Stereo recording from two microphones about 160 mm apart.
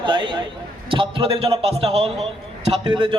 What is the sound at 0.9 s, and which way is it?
A man's voice, 35° right (ahead or behind).